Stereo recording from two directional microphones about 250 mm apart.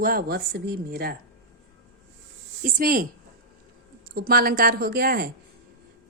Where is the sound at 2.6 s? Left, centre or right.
Right.